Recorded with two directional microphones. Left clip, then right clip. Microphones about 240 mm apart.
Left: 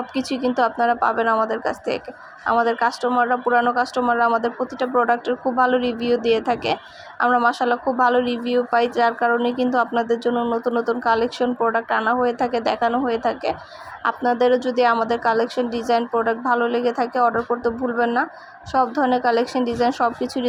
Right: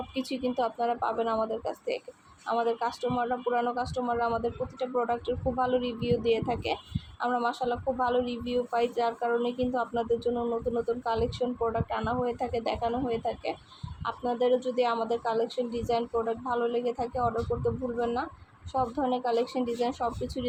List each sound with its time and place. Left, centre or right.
0.1 s speech: centre